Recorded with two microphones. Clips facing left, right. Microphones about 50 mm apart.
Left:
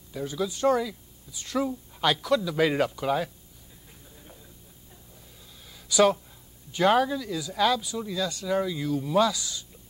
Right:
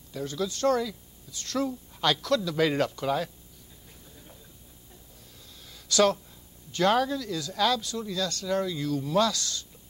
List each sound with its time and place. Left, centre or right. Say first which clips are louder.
0.1 s speech: left 1 dB; centre
5.7 s a sound: left 2 dB; centre
6.7 s speech: left 2 dB; centre